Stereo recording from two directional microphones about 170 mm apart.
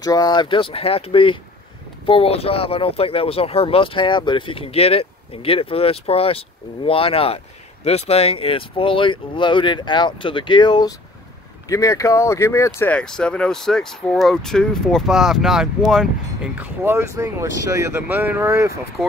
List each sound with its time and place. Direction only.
0.0 s speech: 25° left (ahead or behind); by 16.1 s centre (ahead or behind)
16.5 s speech: 10° right (ahead or behind)